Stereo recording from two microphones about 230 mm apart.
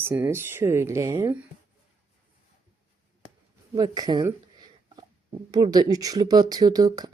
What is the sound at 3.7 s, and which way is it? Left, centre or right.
Speech, centre.